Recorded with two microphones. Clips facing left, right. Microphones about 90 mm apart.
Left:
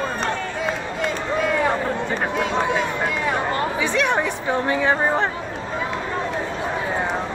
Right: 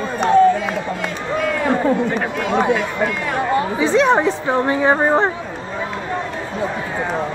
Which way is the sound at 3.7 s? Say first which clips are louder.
Right 8 dB; 30° right (ahead or behind).